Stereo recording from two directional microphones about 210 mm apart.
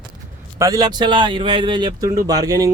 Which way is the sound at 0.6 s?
15° right (ahead or behind).